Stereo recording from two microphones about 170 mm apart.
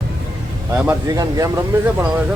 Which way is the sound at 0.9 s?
20° right (ahead or behind).